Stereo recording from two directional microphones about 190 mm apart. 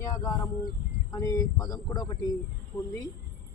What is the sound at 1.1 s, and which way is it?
Speech, 20° left (ahead or behind).